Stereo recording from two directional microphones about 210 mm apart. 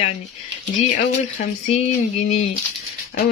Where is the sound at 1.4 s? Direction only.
30° left (ahead or behind).